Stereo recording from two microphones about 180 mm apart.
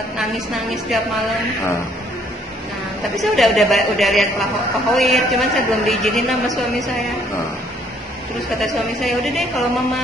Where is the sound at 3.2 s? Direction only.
Centre (ahead or behind).